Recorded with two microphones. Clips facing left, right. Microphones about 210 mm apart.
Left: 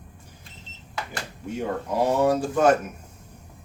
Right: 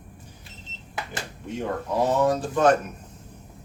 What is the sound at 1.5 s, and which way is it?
Speech, 10° left (ahead or behind).